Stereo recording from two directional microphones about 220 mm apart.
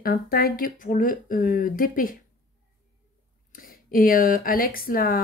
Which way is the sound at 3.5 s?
40° left (ahead or behind).